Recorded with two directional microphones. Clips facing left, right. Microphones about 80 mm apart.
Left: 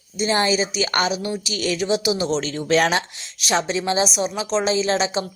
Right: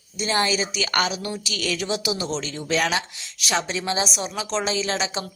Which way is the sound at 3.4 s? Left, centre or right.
Left.